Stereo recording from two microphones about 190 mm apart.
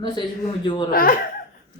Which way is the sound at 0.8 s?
50° left (ahead or behind).